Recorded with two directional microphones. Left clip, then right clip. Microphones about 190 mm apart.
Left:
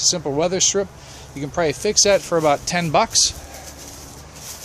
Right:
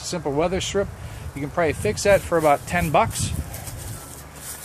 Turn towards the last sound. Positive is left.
turn(degrees=20)  # may be behind; listen again after turning